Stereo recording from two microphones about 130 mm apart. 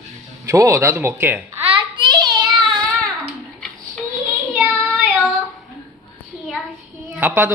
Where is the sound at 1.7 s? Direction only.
35° right (ahead or behind).